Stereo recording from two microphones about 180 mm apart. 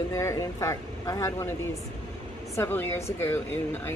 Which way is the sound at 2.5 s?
10° left (ahead or behind).